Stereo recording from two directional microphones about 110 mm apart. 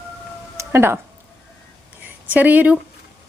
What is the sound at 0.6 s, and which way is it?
Music, 25° right (ahead or behind).